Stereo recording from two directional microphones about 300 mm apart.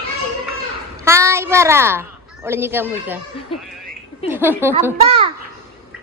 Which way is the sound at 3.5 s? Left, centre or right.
Centre.